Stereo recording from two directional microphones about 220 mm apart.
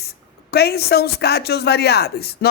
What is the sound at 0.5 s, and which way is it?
A woman's voice, 45° left (ahead or behind).